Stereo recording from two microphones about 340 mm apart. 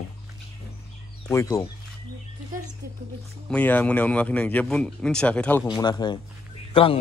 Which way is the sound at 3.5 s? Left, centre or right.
Centre.